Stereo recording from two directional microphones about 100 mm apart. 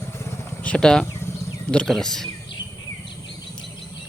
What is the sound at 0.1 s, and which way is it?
Vehicle, 25° left (ahead or behind).